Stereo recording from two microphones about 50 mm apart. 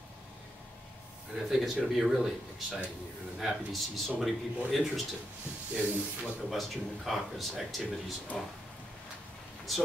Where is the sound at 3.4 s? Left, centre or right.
Centre.